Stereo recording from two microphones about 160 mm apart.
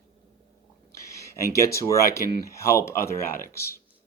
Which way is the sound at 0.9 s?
20° left (ahead or behind).